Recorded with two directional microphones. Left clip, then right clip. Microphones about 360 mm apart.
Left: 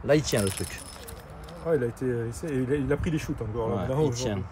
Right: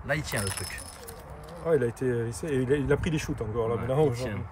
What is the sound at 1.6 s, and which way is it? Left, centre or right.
Speech, right.